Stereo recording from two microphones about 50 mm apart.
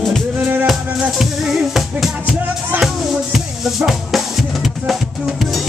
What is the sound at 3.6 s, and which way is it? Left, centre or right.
Music, centre.